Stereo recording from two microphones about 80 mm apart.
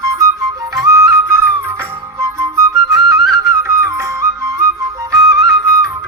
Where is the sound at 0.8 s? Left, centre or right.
Right.